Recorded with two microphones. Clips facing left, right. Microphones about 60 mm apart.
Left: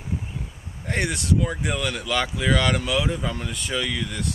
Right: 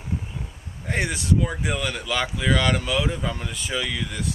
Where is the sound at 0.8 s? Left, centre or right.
Centre.